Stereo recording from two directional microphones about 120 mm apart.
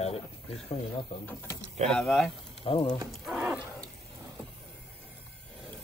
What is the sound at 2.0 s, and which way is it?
Speech, centre (ahead or behind).